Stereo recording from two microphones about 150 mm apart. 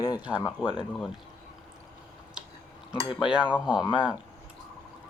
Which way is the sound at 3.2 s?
5° right (ahead or behind).